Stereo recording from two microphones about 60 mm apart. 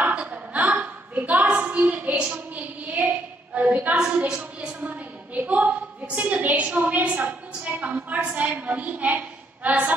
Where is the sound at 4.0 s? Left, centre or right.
Centre.